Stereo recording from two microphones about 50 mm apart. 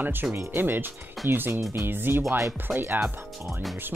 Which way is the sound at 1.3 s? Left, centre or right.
Right.